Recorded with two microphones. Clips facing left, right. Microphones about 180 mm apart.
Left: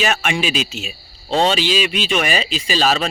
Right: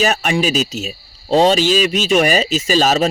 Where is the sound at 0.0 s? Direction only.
40° right (ahead or behind).